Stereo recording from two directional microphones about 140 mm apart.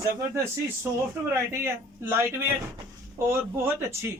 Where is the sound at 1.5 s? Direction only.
15° right (ahead or behind).